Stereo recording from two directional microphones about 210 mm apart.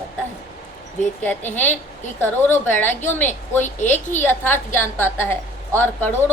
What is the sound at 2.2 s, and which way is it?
A woman's voice, 10° left (ahead or behind).